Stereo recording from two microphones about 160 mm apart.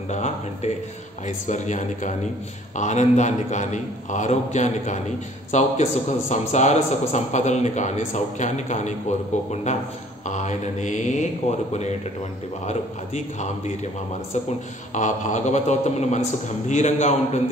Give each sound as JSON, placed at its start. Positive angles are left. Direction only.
{"t": 0.1, "sound": "a man's voice", "side_deg": 45}
{"t": 12.6, "sound": "a man's voice", "side_deg": 45}
{"t": 15.0, "sound": "a man's voice", "side_deg": 50}